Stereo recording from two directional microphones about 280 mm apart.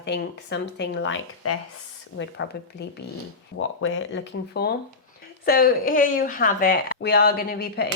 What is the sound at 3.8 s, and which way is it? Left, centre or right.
Speech, left.